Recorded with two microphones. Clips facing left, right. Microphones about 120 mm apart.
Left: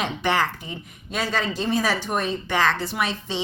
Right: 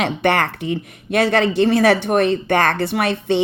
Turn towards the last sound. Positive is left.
turn(degrees=-60)  # may be behind; listen again after turning